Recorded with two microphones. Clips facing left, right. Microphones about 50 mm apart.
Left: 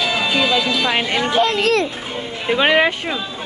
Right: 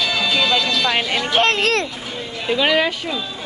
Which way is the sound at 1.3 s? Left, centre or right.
Right.